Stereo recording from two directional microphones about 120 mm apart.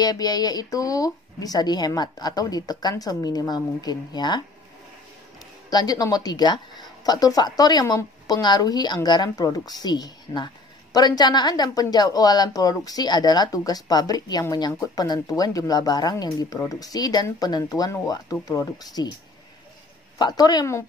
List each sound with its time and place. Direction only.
0.0 s speech: 30° left (ahead or behind)
5.7 s speech: 35° left (ahead or behind)
20.2 s speech: 35° left (ahead or behind)